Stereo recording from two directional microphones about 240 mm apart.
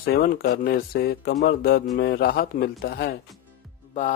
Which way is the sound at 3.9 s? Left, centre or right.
Left.